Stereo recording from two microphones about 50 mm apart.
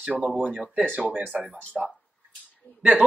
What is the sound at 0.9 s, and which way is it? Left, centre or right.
Speech, right.